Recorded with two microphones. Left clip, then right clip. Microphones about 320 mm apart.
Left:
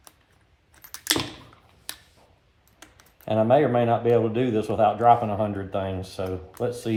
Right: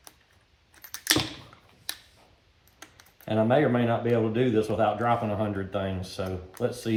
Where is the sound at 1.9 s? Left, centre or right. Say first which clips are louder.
Right 2 dB; centre.